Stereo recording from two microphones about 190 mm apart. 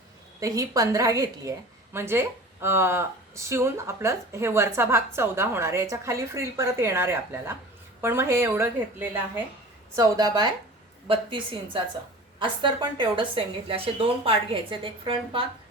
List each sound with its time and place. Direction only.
0.3 s a woman's voice: 15° right (ahead or behind)